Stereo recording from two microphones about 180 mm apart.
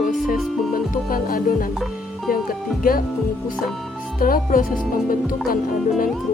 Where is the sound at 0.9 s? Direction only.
50° left (ahead or behind).